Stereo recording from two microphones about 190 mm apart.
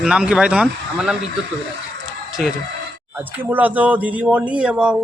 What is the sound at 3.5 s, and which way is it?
Speech, 10° right (ahead or behind).